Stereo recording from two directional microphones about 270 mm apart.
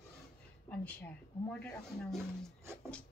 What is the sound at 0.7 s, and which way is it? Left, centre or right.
Speech, centre.